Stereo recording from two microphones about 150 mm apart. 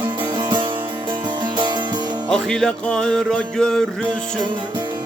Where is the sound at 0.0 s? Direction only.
30° right (ahead or behind).